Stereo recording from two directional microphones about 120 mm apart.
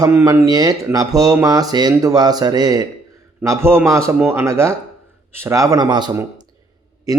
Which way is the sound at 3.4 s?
25° right (ahead or behind).